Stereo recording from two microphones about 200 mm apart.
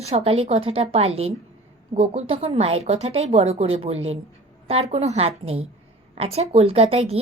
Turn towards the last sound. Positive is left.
turn(degrees=-30)  # may be behind; listen again after turning